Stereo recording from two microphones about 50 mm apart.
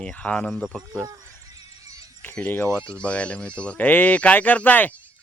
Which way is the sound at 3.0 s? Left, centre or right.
Left.